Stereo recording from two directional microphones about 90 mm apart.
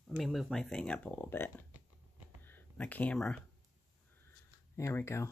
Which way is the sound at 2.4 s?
20° left (ahead or behind).